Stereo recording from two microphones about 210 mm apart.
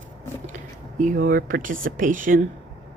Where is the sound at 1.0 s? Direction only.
40° right (ahead or behind).